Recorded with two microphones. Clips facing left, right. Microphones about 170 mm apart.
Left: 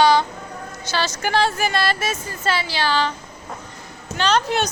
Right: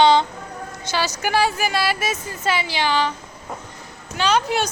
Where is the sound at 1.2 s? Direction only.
10° right (ahead or behind).